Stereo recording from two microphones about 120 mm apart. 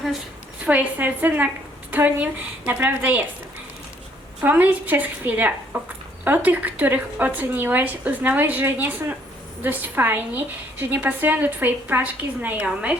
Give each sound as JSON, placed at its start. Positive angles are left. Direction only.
{"t": 0.6, "sound": "a woman's voice", "side_deg": -10}
{"t": 4.4, "sound": "a woman's voice", "side_deg": -15}